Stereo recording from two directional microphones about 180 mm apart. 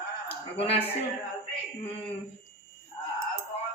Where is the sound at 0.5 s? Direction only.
35° left (ahead or behind).